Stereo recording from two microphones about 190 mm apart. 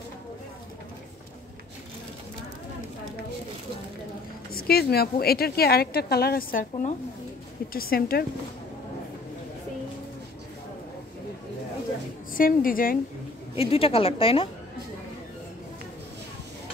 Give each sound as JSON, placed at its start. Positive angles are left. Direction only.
{"t": 4.6, "sound": "speech", "side_deg": 55}
{"t": 12.4, "sound": "speech", "side_deg": 50}
{"t": 13.6, "sound": "a woman's voice", "side_deg": 30}